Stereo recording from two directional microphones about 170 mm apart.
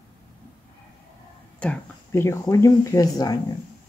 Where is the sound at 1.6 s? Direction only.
10° left (ahead or behind).